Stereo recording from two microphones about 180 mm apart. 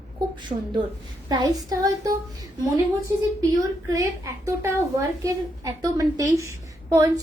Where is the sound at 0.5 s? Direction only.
40° right (ahead or behind).